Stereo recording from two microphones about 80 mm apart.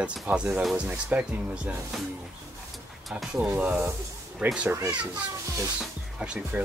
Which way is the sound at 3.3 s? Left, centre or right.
Centre.